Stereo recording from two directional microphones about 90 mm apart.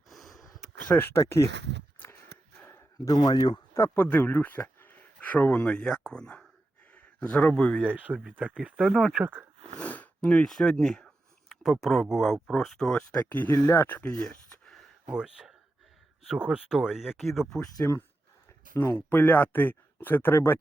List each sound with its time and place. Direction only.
0.1 s a sound: centre (ahead or behind)
0.9 s speech: 25° left (ahead or behind)
1.2 s speech: 35° left (ahead or behind)
2.6 s a sound: 30° left (ahead or behind)
3.1 s speech: 45° left (ahead or behind)
3.8 s a man's voice: 25° left (ahead or behind); by 7.9 s 10° left (ahead or behind)
7.9 s speech: 15° right (ahead or behind)
9.2 s speech: 20° right (ahead or behind)
9.7 s speech: 15° left (ahead or behind)
13.2 s speech: 25° left (ahead or behind)
14.3 s a sound: 5° left (ahead or behind)
15.0 s speech: 10° right (ahead or behind)
18.8 s speech: 25° left (ahead or behind)